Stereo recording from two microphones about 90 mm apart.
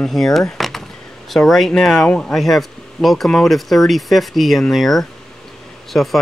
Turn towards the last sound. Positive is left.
turn(degrees=0)  # may be behind; listen again after turning